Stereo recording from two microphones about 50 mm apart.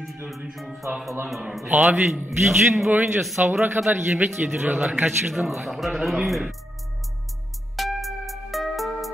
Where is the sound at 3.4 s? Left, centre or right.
Right.